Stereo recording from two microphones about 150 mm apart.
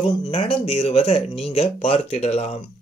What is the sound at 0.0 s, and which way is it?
Speech, 40° left (ahead or behind).